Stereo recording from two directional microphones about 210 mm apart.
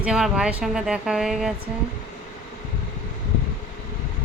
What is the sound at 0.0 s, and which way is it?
Speech, 5° right (ahead or behind).